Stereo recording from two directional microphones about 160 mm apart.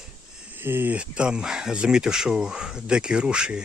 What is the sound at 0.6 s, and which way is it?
Speech, 15° right (ahead or behind).